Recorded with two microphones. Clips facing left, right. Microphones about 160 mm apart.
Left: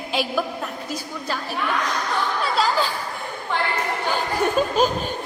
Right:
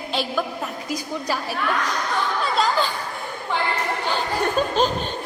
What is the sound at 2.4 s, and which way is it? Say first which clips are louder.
Speech: even; centre (ahead or behind).